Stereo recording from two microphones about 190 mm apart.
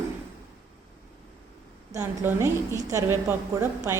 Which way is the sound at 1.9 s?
15° right (ahead or behind).